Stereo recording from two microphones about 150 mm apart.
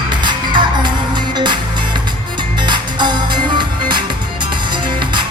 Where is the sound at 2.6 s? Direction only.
30° right (ahead or behind).